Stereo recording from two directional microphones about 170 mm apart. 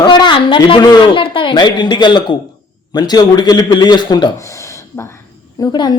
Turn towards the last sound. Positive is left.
turn(degrees=25)  # may be behind; listen again after turning